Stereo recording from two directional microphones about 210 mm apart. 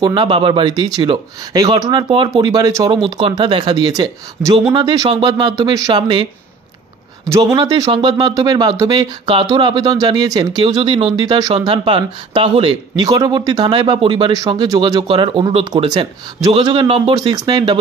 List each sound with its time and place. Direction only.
0.0 s speech: 25° right (ahead or behind)
7.2 s speech: 15° right (ahead or behind)